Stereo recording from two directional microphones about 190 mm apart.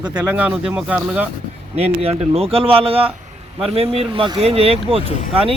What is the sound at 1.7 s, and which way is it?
Speech, 35° right (ahead or behind).